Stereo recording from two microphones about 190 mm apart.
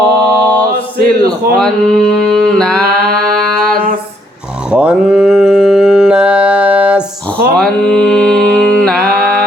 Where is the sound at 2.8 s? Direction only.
55° right (ahead or behind).